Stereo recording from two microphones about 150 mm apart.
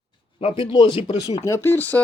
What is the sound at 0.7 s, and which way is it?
Speech, 30° left (ahead or behind).